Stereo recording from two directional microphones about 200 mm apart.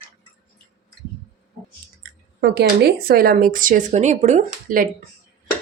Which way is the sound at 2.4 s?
55° right (ahead or behind).